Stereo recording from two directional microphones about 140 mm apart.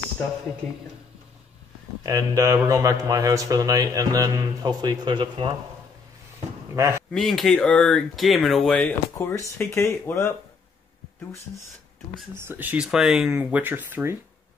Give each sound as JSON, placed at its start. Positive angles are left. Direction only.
{"t": 2.0, "sound": "a man's voice", "side_deg": -25}
{"t": 6.7, "sound": "a man's voice", "side_deg": -20}
{"t": 7.1, "sound": "speech", "side_deg": 0}
{"t": 12.4, "sound": "speech", "side_deg": -15}